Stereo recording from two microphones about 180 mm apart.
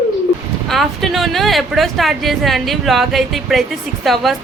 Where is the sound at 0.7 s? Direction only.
Centre (ahead or behind).